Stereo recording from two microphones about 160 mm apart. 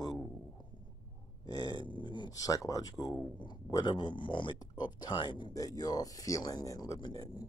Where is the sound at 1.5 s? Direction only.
25° left (ahead or behind).